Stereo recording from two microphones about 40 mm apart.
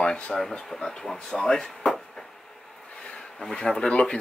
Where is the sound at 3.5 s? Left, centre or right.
Centre.